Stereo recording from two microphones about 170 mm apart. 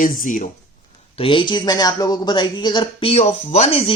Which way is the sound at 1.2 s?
30° left (ahead or behind).